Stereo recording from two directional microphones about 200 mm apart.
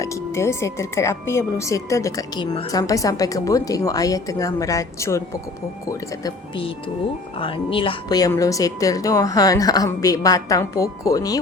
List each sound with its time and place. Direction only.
0.0 s speech: 15° left (ahead or behind)